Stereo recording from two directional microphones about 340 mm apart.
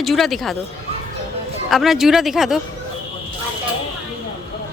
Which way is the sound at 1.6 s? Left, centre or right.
Centre.